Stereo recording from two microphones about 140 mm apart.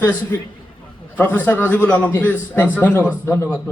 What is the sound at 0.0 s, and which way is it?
A man's voice, 15° left (ahead or behind).